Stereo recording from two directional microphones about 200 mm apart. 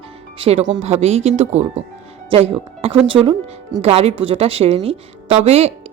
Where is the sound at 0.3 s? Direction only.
30° right (ahead or behind).